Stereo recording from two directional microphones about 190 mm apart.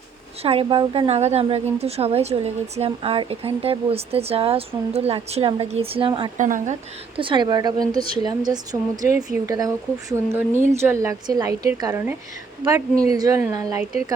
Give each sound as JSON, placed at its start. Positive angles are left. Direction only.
{"t": 0.4, "sound": "a woman's voice", "side_deg": -30}
{"t": 6.3, "sound": "a woman's voice", "side_deg": -40}
{"t": 7.2, "sound": "a woman's voice", "side_deg": -25}